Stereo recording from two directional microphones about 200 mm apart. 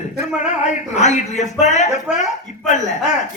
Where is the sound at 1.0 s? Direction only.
35° left (ahead or behind).